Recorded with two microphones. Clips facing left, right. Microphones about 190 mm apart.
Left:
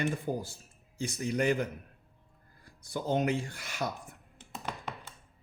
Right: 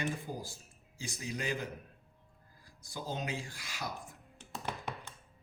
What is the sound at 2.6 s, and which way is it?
Speech, 60° left (ahead or behind).